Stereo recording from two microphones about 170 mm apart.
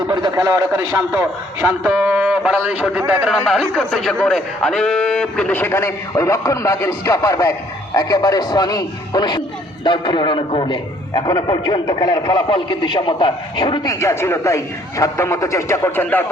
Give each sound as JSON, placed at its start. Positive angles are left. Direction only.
{"t": 0.1, "sound": "a man's voice", "side_deg": -20}
{"t": 14.0, "sound": "a man's voice", "side_deg": 15}